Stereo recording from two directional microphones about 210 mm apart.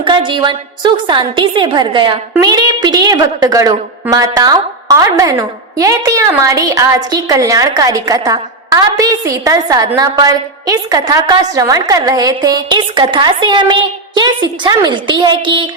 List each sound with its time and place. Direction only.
0.0 s a woman's voice: 25° right (ahead or behind)